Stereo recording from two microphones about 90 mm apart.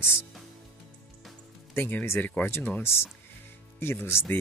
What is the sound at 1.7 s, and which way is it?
Speech, 20° left (ahead or behind).